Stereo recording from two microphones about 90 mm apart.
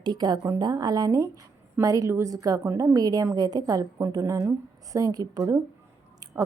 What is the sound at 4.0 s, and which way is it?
A woman's voice, 35° right (ahead or behind).